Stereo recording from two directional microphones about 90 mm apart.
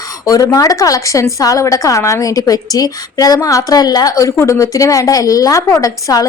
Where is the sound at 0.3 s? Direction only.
40° left (ahead or behind).